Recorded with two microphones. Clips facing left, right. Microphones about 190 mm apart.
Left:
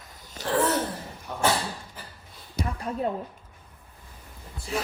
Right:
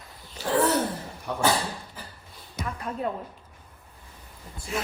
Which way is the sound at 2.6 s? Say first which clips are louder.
Left 2 dB; 35° left (ahead or behind).